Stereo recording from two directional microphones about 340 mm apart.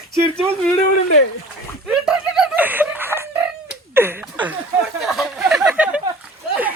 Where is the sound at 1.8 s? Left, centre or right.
Centre.